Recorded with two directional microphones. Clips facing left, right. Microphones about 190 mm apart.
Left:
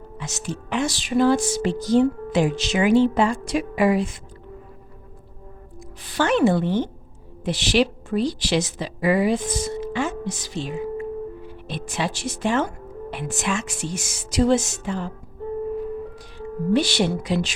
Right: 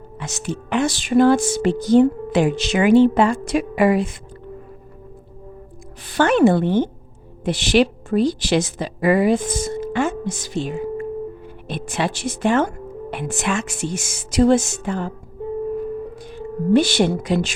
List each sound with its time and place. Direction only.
0.2 s speech: 55° right (ahead or behind)
6.1 s speech: 55° right (ahead or behind)
16.2 s speech: 50° right (ahead or behind)